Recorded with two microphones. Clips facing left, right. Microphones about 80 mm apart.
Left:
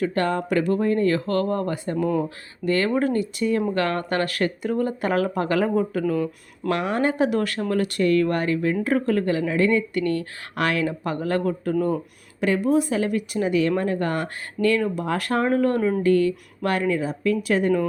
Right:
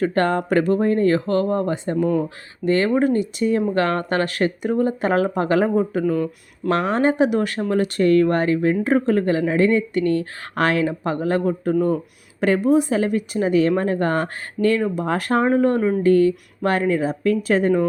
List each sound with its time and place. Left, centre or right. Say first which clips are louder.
0.0 s speech: right 4 dB; right
6.7 s speech: right 4 dB; right
7.0 s speech: right 3 dB; right